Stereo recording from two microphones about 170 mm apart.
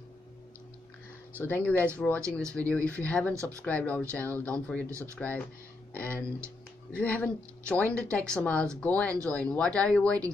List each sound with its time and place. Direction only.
1.4 s speech: 10° left (ahead or behind)